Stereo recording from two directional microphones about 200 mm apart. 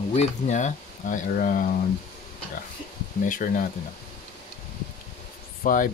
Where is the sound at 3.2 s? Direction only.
40° left (ahead or behind).